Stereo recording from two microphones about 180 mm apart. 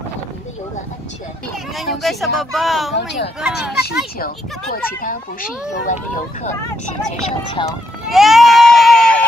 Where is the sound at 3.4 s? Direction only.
5° right (ahead or behind).